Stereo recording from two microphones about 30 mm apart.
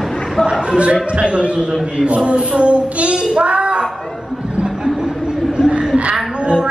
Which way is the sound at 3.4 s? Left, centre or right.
Right.